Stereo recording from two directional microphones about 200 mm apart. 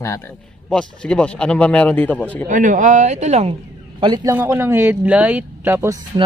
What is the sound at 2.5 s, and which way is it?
Speech, 40° right (ahead or behind).